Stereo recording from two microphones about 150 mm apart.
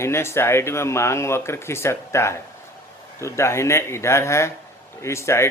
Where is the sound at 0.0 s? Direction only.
15° left (ahead or behind).